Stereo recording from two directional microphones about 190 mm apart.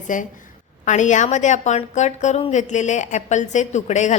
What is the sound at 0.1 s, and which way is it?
A woman's voice, 40° left (ahead or behind).